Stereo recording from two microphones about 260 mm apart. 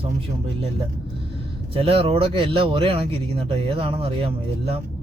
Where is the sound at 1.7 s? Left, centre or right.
Right.